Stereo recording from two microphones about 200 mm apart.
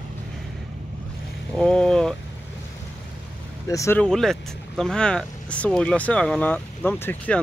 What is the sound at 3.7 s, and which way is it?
Speech, 15° left (ahead or behind).